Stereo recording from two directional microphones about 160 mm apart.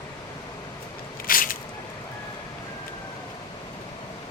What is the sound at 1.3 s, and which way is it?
Squish, 60° left (ahead or behind).